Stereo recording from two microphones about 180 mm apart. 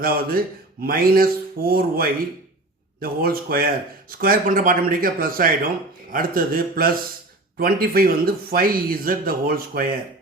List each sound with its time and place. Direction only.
0.0 s a man's voice: 55° right (ahead or behind)